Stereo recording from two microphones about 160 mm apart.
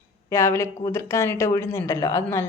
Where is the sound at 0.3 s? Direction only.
15° left (ahead or behind).